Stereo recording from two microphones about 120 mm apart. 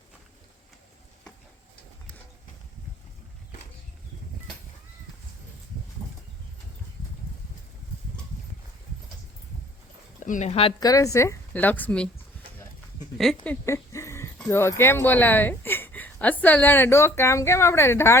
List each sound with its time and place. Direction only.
10.2 s speech: 80° left; by 10.8 s 55° left (ahead or behind)
10.8 s a woman's voice: 30° left (ahead or behind)
11.5 s speech: 15° left (ahead or behind)
13.4 s a sound: 20° left (ahead or behind)
14.5 s speech: 20° left (ahead or behind)